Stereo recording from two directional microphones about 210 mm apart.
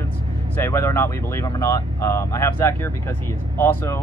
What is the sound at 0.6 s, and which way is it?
Speech, 15° left (ahead or behind).